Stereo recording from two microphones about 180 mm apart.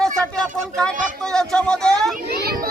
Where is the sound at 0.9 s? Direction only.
45° right (ahead or behind).